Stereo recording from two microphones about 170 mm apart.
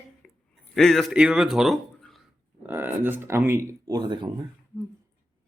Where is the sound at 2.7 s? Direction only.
10° right (ahead or behind).